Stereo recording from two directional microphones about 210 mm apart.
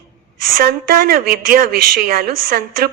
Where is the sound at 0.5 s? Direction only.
45° right (ahead or behind).